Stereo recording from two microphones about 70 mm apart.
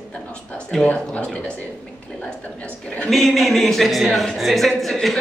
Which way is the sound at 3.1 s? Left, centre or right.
Centre.